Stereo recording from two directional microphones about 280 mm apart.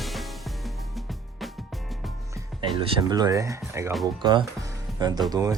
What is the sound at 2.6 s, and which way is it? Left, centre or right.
Speech, centre.